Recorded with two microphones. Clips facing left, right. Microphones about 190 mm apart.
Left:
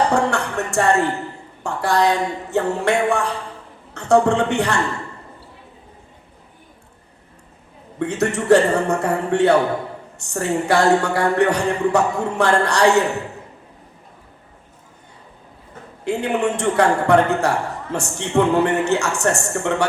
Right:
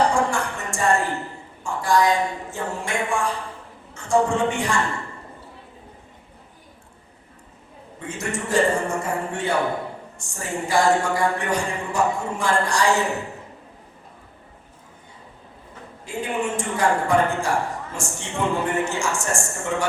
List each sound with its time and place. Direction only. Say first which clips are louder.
0.1 s music: left 3 dB; 65° left (ahead or behind)
1.6 s speech: left 2 dB; 65° left (ahead or behind)
7.9 s speech: left 9 dB; 65° left (ahead or behind)
16.0 s speech: left 6 dB; 65° left (ahead or behind)